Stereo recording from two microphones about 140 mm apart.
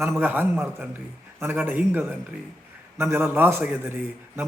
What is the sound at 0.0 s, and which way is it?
A man's voice, 15° right (ahead or behind).